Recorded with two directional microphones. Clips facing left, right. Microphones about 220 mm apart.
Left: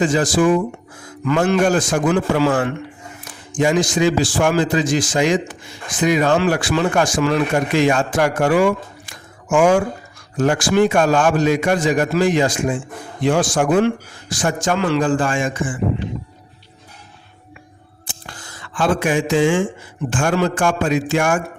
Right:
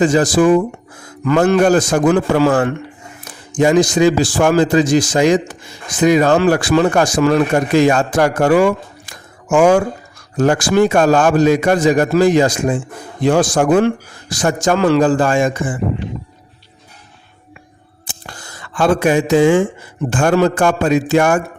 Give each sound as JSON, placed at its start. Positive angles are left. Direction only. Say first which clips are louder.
{"t": 0.0, "sound": "a man's voice", "louder": "right 4 dB", "side_deg": -40}
{"t": 18.7, "sound": "a man's voice", "louder": "right 4 dB", "side_deg": -40}